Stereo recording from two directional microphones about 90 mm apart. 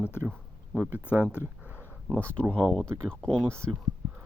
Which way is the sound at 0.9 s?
20° right (ahead or behind).